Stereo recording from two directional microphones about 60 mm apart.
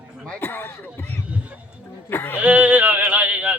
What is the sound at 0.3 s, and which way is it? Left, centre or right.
Speech, left.